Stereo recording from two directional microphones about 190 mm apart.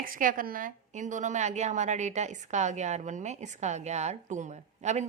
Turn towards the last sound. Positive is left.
turn(degrees=-35)  # may be behind; listen again after turning